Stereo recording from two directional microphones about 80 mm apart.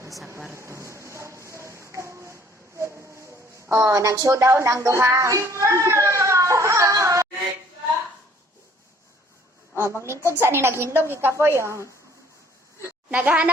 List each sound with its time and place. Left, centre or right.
0.5 s tap: right
3.8 s a woman's voice: right
9.7 s speech: right
12.8 s a woman's voice: right